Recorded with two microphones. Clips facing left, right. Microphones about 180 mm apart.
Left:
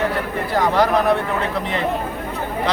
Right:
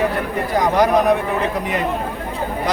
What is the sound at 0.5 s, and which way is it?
Speech, 15° right (ahead or behind).